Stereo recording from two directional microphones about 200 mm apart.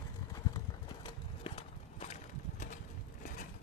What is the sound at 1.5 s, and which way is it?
Horse, 25° left (ahead or behind).